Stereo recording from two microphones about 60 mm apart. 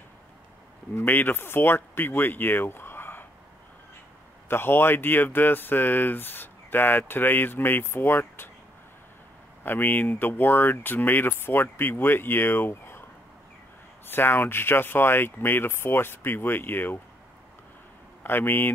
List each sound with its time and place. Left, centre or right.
1.0 s speech: left
4.5 s speech: left
9.6 s speech: left
14.0 s speech: left
18.2 s speech: left